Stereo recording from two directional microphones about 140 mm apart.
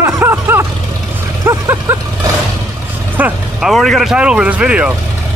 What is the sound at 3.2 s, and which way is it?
Speech, centre (ahead or behind).